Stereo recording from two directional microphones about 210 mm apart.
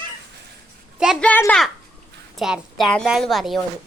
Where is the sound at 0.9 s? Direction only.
5° right (ahead or behind).